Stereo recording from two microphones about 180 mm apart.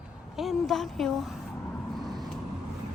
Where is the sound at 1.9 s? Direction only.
Centre (ahead or behind).